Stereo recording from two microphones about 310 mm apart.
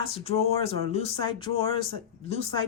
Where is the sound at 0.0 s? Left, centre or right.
Centre.